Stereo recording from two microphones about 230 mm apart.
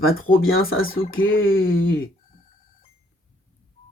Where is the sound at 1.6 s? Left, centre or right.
Left.